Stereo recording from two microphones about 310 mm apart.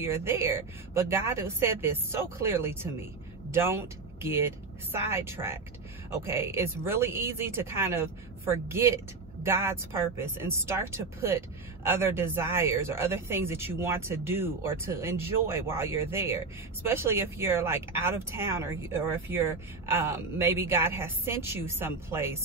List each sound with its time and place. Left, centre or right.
0.0 s speech: centre